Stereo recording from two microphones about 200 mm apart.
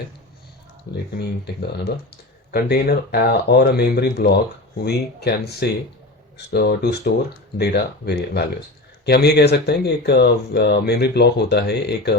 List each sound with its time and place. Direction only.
0.9 s speech: 50° left (ahead or behind)
2.5 s speech: 50° left (ahead or behind)